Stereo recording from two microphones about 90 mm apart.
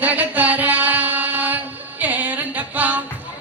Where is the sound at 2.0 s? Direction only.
15° right (ahead or behind).